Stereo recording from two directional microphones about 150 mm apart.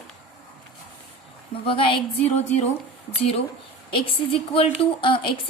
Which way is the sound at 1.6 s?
35° left (ahead or behind).